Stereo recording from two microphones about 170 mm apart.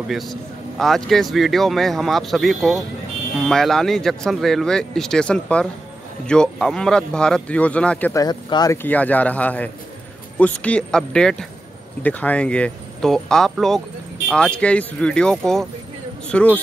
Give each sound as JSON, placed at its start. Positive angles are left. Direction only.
{"t": 0.1, "sound": "speech", "side_deg": 0}
{"t": 8.1, "sound": "speech", "side_deg": 20}
{"t": 8.8, "sound": "speech", "side_deg": 10}